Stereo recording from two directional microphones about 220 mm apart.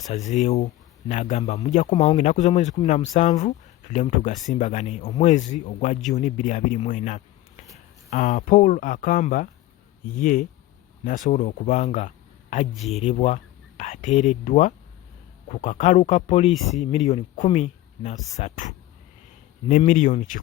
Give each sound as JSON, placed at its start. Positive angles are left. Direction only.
{"t": 0.1, "sound": "speech", "side_deg": 30}
{"t": 12.7, "sound": "speech", "side_deg": 0}
{"t": 13.0, "sound": "speech", "side_deg": 30}